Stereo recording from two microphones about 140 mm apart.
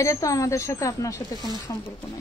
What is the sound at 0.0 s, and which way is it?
Speech, 25° left (ahead or behind).